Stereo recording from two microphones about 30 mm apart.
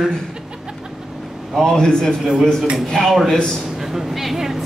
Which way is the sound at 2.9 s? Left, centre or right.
Centre.